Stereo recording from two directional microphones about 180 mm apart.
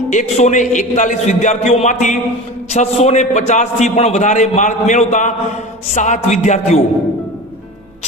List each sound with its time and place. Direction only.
0.1 s a man's voice: 40° left (ahead or behind)